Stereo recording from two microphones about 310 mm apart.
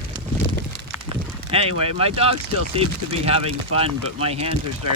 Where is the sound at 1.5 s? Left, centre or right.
Centre.